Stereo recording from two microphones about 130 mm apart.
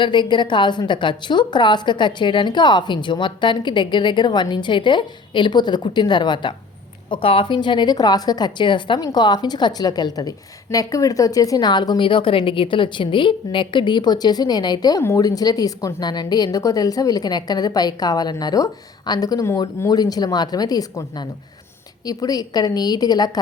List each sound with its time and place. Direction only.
0.0 s a woman's voice: 35° left (ahead or behind)